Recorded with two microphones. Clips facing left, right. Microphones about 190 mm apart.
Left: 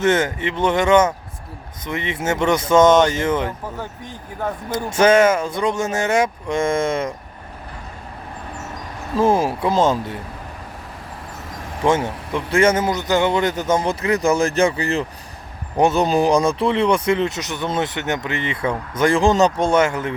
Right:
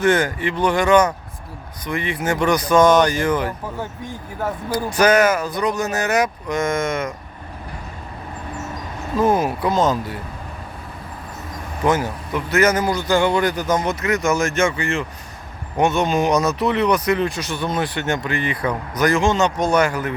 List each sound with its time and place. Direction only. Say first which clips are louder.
0.0 s speech: even; 25° left (ahead or behind)
3.8 s speech: right 2 dB; 15° right (ahead or behind)
4.9 s speech: left 2 dB; 25° left (ahead or behind)
9.1 s speech: left 1 dB; 30° left (ahead or behind)
11.8 s speech: left 1 dB; 25° left (ahead or behind)